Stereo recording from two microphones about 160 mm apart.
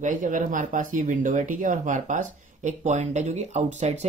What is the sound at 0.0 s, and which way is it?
Speech, 55° right (ahead or behind).